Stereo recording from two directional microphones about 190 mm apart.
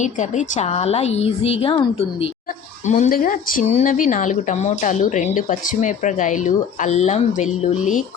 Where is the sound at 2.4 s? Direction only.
45° left (ahead or behind).